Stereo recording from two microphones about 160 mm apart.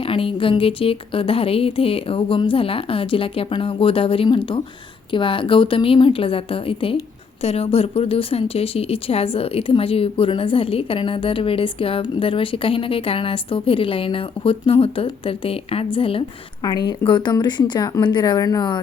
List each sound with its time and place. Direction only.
0.0 s a woman's voice: 35° left (ahead or behind)